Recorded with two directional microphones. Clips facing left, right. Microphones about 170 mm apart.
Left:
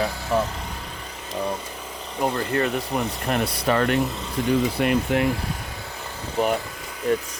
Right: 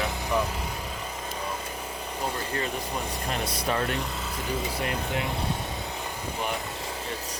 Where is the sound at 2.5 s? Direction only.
60° left (ahead or behind).